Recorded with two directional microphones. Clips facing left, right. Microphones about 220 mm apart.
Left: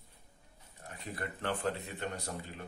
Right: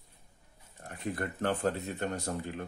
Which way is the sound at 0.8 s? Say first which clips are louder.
Right 6 dB; 45° right (ahead or behind).